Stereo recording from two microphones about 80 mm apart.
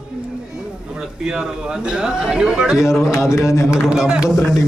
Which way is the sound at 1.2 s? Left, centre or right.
Centre.